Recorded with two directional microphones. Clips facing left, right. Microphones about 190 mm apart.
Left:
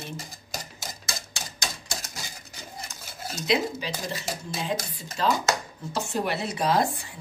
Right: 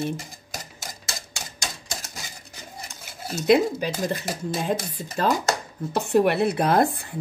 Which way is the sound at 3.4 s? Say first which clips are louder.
Right 7 dB; 55° right (ahead or behind).